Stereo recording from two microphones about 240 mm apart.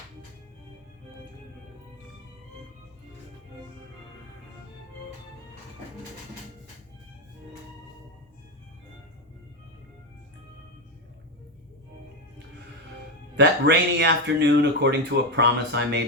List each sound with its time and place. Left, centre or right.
13.3 s speech: right